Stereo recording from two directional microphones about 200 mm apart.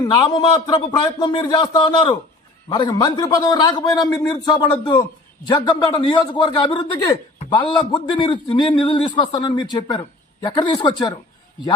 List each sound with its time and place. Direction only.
0.0 s a man's voice: 20° left (ahead or behind)